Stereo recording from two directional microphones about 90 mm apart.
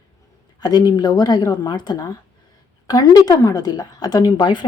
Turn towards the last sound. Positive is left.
turn(degrees=55)  # may be behind; listen again after turning